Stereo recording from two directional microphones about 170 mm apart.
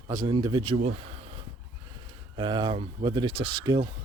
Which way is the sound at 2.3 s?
25° right (ahead or behind).